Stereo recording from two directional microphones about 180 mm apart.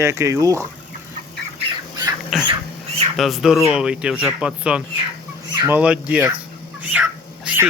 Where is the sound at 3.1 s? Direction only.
Centre (ahead or behind).